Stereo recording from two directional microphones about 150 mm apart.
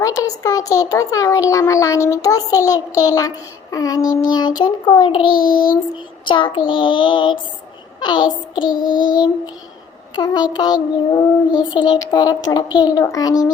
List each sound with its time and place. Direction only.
0.0 s a child's voice: 25° left (ahead or behind)
5.4 s child singing: 70° left (ahead or behind)
6.2 s child singing: 35° left (ahead or behind)
7.9 s a child's voice: 30° left (ahead or behind)
10.2 s a child's voice: 30° left (ahead or behind)